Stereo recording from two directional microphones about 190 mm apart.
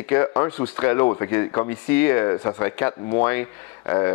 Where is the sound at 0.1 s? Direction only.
15° left (ahead or behind).